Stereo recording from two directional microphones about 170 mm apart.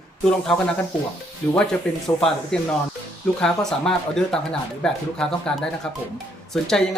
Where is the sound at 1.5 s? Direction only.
5° left (ahead or behind).